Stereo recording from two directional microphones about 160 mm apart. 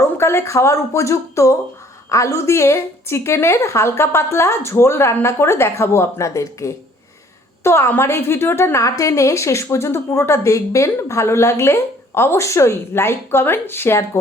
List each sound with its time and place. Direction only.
0.0 s a woman's voice: 15° left (ahead or behind)